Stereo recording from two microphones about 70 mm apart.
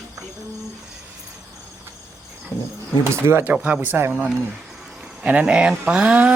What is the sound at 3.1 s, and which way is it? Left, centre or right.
Speech, right.